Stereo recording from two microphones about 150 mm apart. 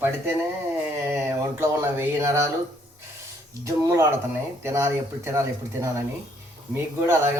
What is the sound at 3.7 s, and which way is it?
Speech, 20° right (ahead or behind).